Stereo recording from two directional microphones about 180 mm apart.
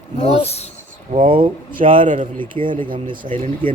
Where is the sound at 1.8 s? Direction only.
45° right (ahead or behind).